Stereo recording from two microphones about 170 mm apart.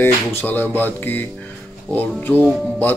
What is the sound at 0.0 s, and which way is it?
Speech, 10° left (ahead or behind).